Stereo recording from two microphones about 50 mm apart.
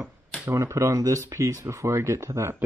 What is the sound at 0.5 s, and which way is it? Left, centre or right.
Speech, right.